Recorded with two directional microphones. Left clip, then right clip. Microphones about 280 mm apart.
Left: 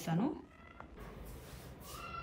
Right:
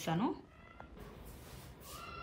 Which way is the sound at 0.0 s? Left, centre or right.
Centre.